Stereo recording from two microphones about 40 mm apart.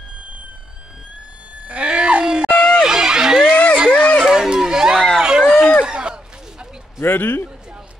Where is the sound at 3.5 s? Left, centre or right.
Left.